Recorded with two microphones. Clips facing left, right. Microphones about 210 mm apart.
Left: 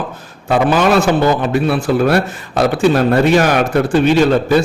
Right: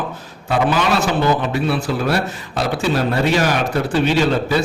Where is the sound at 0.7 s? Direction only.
50° left (ahead or behind).